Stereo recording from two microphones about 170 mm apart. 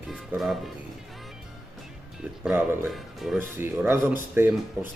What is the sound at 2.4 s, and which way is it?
Speech, 10° right (ahead or behind).